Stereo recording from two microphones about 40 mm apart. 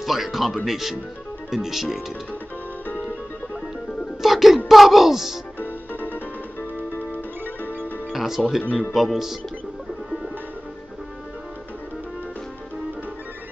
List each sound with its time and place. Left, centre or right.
0.0 s speech: centre
4.2 s speech: centre
5.6 s music: left
8.1 s speech: centre